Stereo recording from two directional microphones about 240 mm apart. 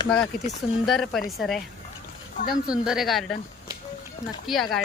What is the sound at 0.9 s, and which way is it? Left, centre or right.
Speech, centre.